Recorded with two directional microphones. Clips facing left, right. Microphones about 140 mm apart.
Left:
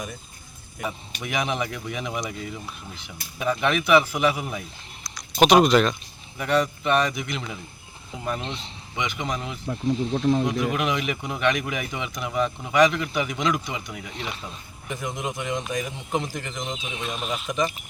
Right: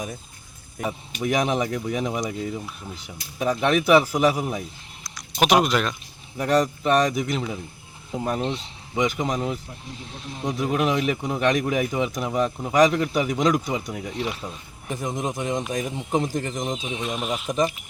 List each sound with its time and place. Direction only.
0.9 s speech: 35° right (ahead or behind)
5.0 s speech: 5° right (ahead or behind)
6.3 s speech: 35° right (ahead or behind)
9.6 s speech: 90° left
10.6 s speech: 35° right (ahead or behind)
14.1 s speech: 5° right (ahead or behind)
14.8 s speech: 40° right (ahead or behind)
16.8 s speech: 15° right (ahead or behind)